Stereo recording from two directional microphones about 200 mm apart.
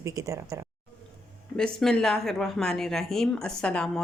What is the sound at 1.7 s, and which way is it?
A woman's voice, centre (ahead or behind).